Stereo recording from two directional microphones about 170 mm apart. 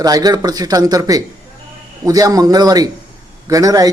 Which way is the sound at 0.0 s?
20° right (ahead or behind).